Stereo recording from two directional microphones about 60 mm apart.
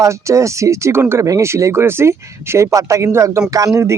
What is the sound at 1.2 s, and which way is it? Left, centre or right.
Speech, right.